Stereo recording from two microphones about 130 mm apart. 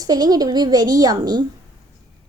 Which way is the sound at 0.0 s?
30° right (ahead or behind).